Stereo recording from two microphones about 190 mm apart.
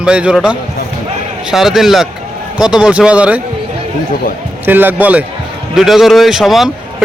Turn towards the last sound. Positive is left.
turn(degrees=0)  # may be behind; listen again after turning